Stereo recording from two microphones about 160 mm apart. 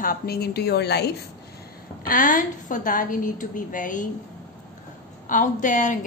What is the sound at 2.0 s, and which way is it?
A woman's voice, 60° left (ahead or behind).